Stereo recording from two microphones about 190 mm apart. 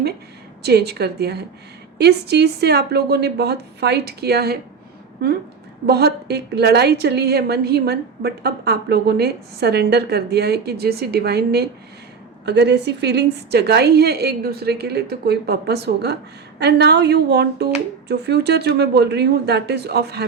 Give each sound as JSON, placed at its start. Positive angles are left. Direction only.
{"t": 0.6, "sound": "a woman's voice", "side_deg": -60}
{"t": 5.8, "sound": "a woman's voice", "side_deg": -60}